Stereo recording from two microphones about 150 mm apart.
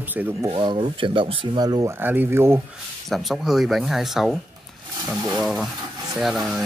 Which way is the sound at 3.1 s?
Centre (ahead or behind).